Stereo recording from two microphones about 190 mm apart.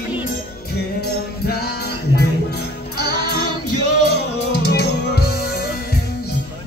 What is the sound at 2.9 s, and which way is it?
Music, 55° left (ahead or behind).